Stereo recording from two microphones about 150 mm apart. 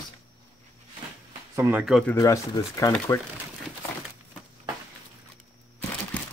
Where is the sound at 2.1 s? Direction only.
20° left (ahead or behind).